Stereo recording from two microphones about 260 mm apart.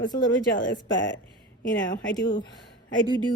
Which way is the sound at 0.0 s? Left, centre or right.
Centre.